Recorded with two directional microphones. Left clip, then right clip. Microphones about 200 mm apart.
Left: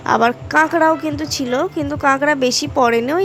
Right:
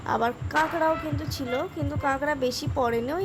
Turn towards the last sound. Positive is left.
turn(degrees=25)  # may be behind; listen again after turning